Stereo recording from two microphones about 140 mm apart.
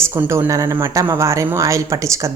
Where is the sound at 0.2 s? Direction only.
20° right (ahead or behind).